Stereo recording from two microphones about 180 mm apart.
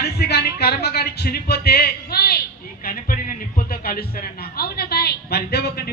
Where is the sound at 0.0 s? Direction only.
60° left (ahead or behind).